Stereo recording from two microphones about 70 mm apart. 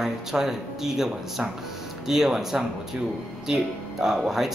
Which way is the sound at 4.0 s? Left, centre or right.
Centre.